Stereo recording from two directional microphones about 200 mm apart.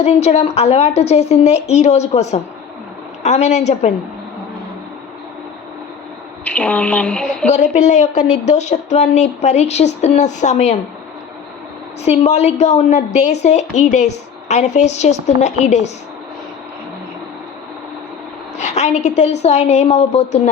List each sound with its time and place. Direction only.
0.0 s speech: 30° left (ahead or behind)
6.4 s speech: 5° left (ahead or behind)
7.4 s speech: 35° left (ahead or behind)
12.0 s speech: 35° left (ahead or behind)
18.5 s speech: 35° left (ahead or behind)